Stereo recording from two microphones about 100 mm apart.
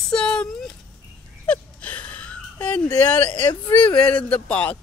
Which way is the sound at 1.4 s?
10° left (ahead or behind).